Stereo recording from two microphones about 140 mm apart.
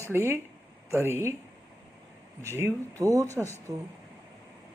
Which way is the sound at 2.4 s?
20° right (ahead or behind).